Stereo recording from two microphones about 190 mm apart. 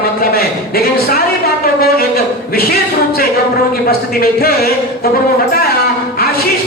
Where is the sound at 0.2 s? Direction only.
50° left (ahead or behind).